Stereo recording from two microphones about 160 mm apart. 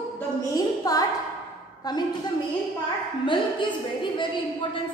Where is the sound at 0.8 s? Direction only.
20° left (ahead or behind).